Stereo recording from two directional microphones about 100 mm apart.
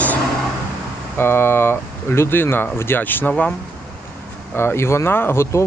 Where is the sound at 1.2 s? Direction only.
25° left (ahead or behind).